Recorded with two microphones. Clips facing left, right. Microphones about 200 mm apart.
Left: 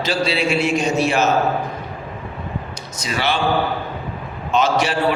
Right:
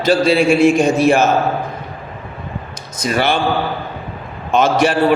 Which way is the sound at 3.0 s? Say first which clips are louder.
Right 5 dB; 50° right (ahead or behind).